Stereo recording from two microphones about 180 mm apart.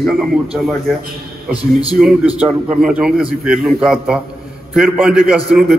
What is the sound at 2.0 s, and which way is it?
A man's voice, 5° right (ahead or behind).